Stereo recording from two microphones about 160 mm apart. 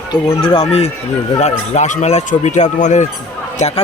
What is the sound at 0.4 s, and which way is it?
Speech, 35° left (ahead or behind).